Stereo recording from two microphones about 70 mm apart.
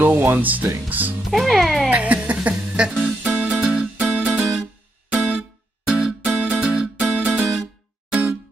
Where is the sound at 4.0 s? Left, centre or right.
Right.